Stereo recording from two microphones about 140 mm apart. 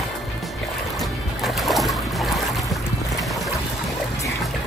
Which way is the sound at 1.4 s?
Centre (ahead or behind).